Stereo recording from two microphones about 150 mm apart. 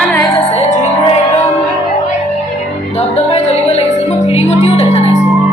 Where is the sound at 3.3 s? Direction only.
45° left (ahead or behind).